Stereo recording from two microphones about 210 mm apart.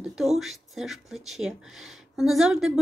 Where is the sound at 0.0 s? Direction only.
Centre (ahead or behind).